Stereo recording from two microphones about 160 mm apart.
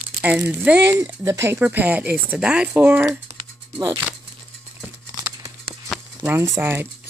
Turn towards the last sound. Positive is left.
turn(degrees=-15)  # may be behind; listen again after turning